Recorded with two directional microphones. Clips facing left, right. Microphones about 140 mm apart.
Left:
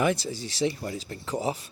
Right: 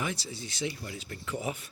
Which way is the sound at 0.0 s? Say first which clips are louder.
Left 10 dB; 60° left (ahead or behind).